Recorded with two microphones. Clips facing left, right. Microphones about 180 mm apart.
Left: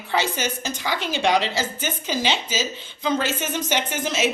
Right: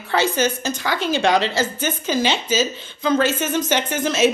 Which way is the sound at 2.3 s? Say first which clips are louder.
Right 5 dB; 15° left (ahead or behind).